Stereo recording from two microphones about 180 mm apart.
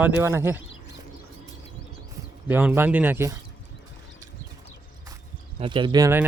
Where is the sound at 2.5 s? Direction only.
10° right (ahead or behind).